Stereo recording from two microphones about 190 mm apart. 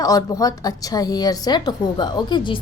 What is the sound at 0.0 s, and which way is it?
Speech, 20° left (ahead or behind).